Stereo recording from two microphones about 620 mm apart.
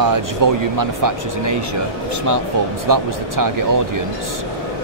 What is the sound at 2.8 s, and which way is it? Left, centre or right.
Speech, right.